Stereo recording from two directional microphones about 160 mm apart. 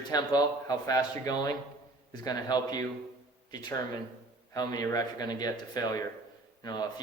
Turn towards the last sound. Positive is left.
turn(degrees=25)  # may be behind; listen again after turning